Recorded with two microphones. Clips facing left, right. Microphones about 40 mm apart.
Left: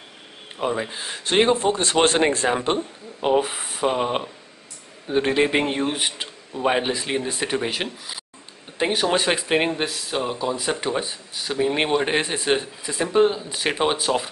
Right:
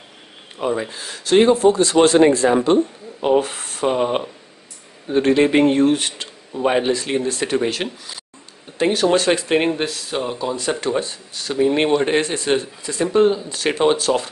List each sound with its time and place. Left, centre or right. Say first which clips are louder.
0.6 s speech: right 3 dB; centre
0.8 s speech: right 4 dB; left
3.2 s speech: right 3 dB; centre
7.8 s speech: right 3 dB; centre
8.7 s speech: right 4 dB; centre